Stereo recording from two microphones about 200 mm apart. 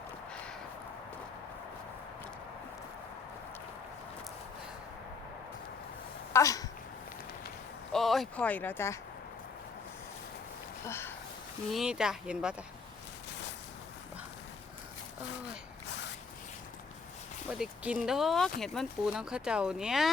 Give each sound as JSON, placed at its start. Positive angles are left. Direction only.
{"t": 6.3, "sound": "speech", "side_deg": 15}
{"t": 7.9, "sound": "speech", "side_deg": 0}
{"t": 10.8, "sound": "speech", "side_deg": 10}
{"t": 11.7, "sound": "speech", "side_deg": 0}
{"t": 17.5, "sound": "speech", "side_deg": -5}